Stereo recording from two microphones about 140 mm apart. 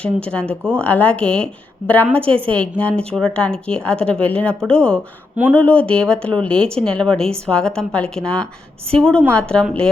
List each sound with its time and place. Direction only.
0.0 s a woman's voice: 10° left (ahead or behind)
0.4 s a woman's voice: 15° right (ahead or behind)
0.8 s a woman's voice: 10° left (ahead or behind)